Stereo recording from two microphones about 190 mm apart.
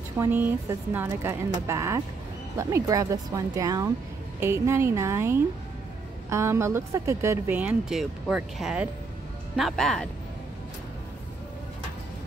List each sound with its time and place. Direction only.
0.2 s speech: 10° right (ahead or behind)